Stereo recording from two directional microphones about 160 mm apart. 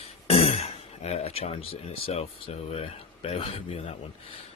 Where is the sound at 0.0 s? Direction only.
40° left (ahead or behind).